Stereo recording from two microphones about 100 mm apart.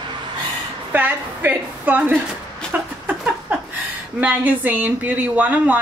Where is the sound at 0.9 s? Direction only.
20° right (ahead or behind).